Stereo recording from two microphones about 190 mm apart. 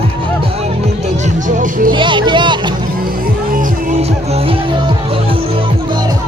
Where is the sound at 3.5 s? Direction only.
40° right (ahead or behind).